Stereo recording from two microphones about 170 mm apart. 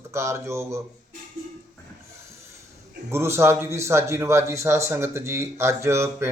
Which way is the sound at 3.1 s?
15° right (ahead or behind).